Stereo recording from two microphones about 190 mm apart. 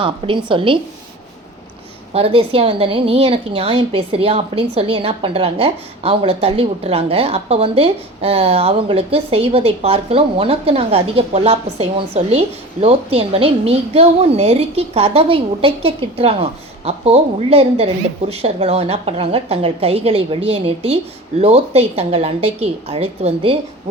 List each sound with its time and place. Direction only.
0.0 s a woman's voice: 25° right (ahead or behind)
2.1 s a woman's voice: 30° right (ahead or behind)